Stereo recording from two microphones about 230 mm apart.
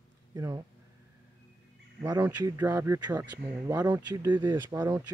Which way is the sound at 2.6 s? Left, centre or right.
Centre.